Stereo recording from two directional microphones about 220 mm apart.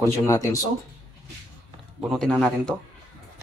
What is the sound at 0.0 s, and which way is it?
Speech, 15° left (ahead or behind).